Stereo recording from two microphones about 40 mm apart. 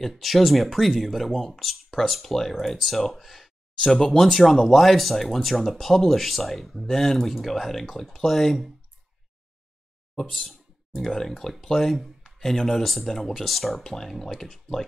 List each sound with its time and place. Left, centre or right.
0.0 s speech: centre
10.5 s speech: centre